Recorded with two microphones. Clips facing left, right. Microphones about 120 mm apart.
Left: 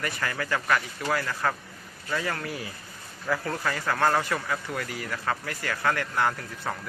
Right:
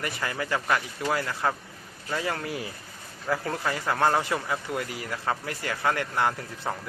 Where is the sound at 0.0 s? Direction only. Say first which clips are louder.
Even; 20° right (ahead or behind).